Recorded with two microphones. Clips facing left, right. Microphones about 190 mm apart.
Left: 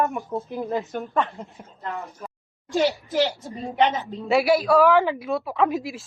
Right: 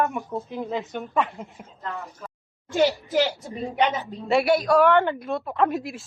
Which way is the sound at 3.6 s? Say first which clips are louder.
Left 2 dB; centre (ahead or behind).